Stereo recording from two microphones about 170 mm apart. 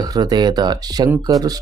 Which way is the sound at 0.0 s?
25° right (ahead or behind).